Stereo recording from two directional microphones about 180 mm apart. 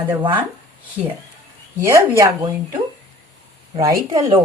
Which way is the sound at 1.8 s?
15° right (ahead or behind).